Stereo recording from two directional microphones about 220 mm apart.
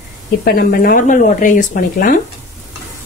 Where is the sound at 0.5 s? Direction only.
40° left (ahead or behind).